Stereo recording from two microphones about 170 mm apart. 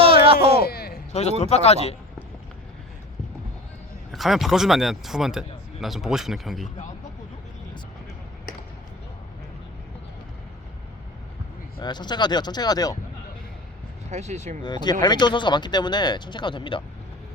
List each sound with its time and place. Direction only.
0.0 s a sound: 35° right (ahead or behind)
0.6 s a sound: 65° left (ahead or behind)
1.1 s a man's voice: 40° left (ahead or behind)
4.1 s speech: centre (ahead or behind)
11.8 s speech: 25° left (ahead or behind)
14.1 s speech: 40° right (ahead or behind)
14.6 s speech: 25° left (ahead or behind)